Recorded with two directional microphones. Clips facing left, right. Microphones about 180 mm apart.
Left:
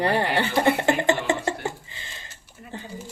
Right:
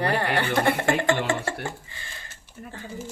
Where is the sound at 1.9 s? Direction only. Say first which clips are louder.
Even; 20° left (ahead or behind).